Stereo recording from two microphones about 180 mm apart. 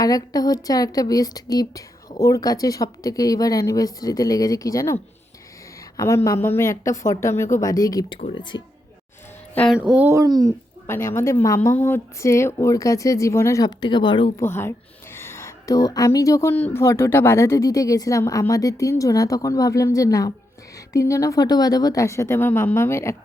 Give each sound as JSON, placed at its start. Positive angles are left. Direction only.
{"t": 0.0, "sound": "speech", "side_deg": 20}
{"t": 6.0, "sound": "speech", "side_deg": 15}
{"t": 9.7, "sound": "speech", "side_deg": -5}
{"t": 10.1, "sound": "speech", "side_deg": -20}
{"t": 10.8, "sound": "speech", "side_deg": 15}
{"t": 15.1, "sound": "speech", "side_deg": 15}